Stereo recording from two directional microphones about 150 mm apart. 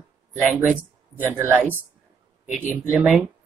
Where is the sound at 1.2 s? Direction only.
15° right (ahead or behind).